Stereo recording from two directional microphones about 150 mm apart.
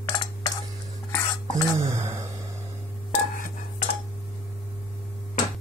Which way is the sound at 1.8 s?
20° right (ahead or behind).